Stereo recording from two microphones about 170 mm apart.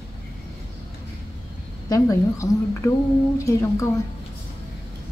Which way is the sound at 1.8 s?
20° left (ahead or behind).